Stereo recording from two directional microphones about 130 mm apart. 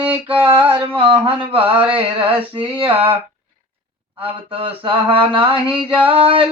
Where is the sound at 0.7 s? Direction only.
40° right (ahead or behind).